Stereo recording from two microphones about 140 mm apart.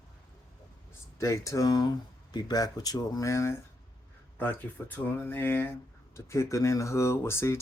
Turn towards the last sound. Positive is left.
turn(degrees=20)  # may be behind; listen again after turning